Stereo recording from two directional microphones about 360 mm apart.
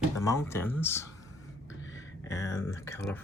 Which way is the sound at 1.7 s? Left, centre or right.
Left.